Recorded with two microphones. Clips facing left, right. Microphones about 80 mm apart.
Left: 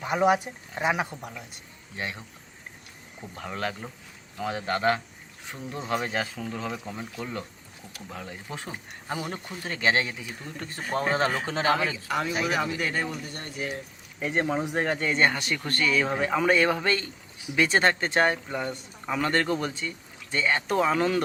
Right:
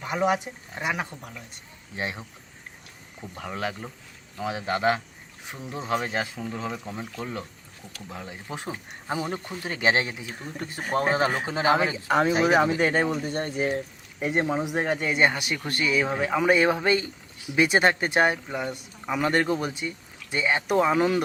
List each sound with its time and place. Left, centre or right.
0.0 s speech: centre
2.0 s speech: right
3.3 s speech: centre
8.1 s speech: centre; by 14.3 s right
14.3 s speech: centre
16.5 s speech: centre